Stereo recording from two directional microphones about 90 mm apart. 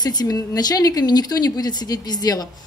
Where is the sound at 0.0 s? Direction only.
50° left (ahead or behind).